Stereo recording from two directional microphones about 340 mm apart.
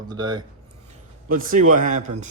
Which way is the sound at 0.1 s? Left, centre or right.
Centre.